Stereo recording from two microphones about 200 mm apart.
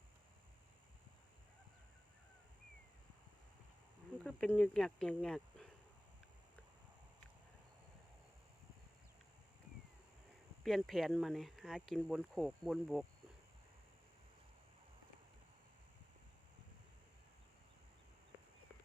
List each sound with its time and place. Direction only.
4.2 s speech: 5° left (ahead or behind)
10.6 s speech: centre (ahead or behind)